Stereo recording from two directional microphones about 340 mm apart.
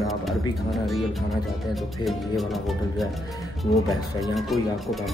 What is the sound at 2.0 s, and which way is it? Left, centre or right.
Speech, centre.